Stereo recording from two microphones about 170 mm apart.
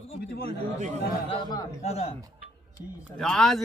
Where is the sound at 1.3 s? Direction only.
25° left (ahead or behind).